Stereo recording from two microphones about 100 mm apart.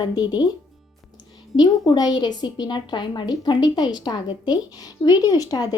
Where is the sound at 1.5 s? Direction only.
45° left (ahead or behind).